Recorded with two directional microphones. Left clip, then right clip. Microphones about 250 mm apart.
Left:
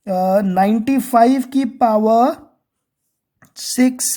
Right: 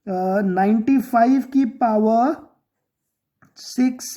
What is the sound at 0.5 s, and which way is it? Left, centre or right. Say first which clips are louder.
Speech: left 3 dB; left.